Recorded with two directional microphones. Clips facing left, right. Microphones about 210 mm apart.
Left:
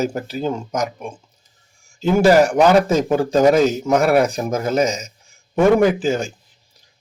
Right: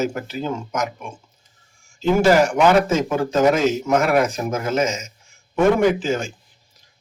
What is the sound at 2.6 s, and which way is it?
A man's voice, 35° left (ahead or behind).